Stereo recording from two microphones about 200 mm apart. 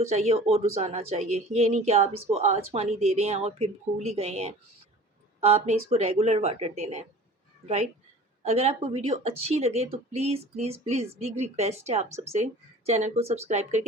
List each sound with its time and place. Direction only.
0.1 s speech: 30° right (ahead or behind)
8.4 s speech: 30° right (ahead or behind)